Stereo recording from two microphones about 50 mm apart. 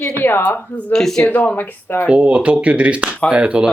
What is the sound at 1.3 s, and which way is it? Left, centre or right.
Speech, left.